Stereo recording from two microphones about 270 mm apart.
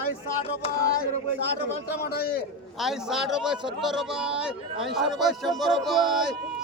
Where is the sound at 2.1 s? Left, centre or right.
Left.